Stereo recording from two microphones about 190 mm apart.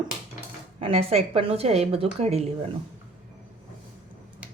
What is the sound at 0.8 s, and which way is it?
A woman's voice, 30° right (ahead or behind).